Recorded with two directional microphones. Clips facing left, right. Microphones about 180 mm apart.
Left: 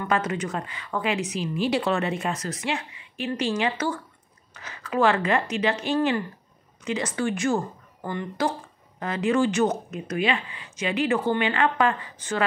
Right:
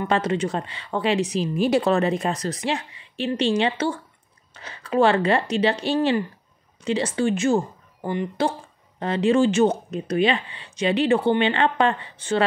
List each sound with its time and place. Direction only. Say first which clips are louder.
0.0 s speech: right 3 dB; 30° right (ahead or behind)